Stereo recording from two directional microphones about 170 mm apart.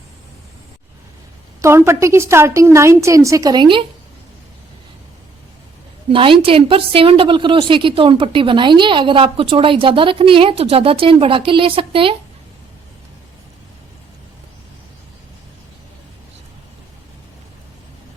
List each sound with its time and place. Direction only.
1.6 s a woman's voice: 15° right (ahead or behind)
6.1 s a woman's voice: 30° right (ahead or behind)